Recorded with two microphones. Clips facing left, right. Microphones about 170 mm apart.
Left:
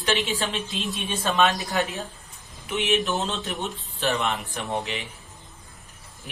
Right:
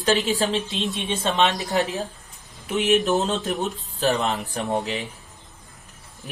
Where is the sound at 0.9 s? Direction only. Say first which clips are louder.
Even; 25° right (ahead or behind).